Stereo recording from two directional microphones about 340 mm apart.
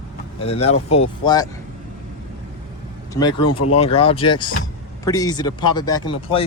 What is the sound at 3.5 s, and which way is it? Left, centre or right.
Speech, left.